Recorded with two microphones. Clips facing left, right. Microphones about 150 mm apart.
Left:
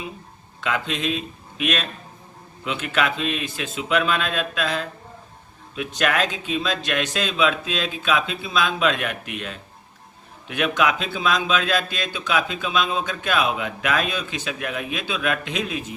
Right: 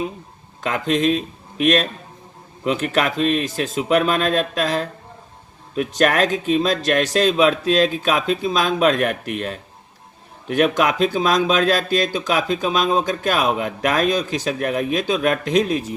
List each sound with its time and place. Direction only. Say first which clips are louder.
0.6 s speech: right 6 dB; 40° right (ahead or behind)